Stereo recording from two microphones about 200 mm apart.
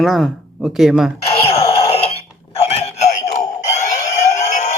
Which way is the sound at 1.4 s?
30° left (ahead or behind).